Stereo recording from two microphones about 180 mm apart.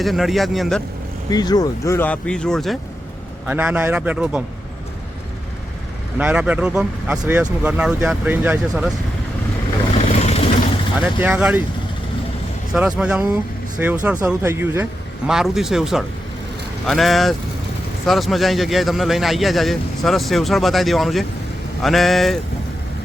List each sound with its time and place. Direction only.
0.0 s speech: centre (ahead or behind)
1.3 s speech: 20° left (ahead or behind); by 2.7 s 5° left (ahead or behind)
3.4 s speech: 10° right (ahead or behind)
6.1 s speech: 10° right (ahead or behind)
9.9 s vehicle: 35° left (ahead or behind)
11.0 s speech: 10° right (ahead or behind)
12.7 s speech: 5° right (ahead or behind)
15.3 s speech: 5° right (ahead or behind)